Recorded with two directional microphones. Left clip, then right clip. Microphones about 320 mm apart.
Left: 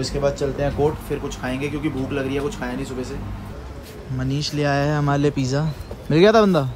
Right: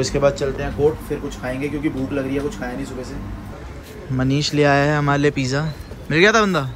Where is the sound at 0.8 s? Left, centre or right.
Centre.